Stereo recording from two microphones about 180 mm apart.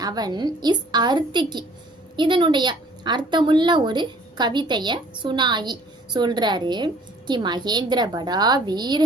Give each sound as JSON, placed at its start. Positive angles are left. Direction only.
{"t": 0.0, "sound": "a woman's voice", "side_deg": -20}